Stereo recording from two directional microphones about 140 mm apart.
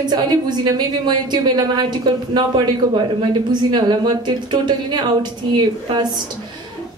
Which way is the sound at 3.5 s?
30° right (ahead or behind).